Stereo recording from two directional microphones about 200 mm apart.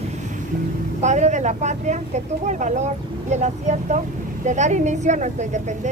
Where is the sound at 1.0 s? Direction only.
35° right (ahead or behind).